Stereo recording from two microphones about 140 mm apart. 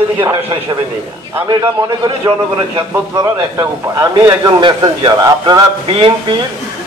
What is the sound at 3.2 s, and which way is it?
Speech, 15° right (ahead or behind).